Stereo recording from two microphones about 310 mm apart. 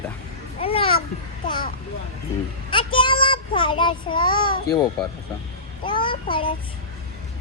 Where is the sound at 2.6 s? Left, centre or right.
Centre.